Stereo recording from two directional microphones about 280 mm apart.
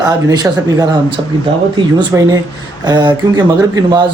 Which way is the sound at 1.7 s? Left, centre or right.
Centre.